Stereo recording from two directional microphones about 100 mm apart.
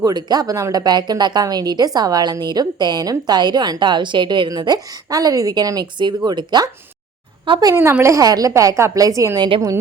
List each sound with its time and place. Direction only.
0.0 s a woman's voice: 45° right (ahead or behind)
7.8 s a woman's voice: 25° right (ahead or behind)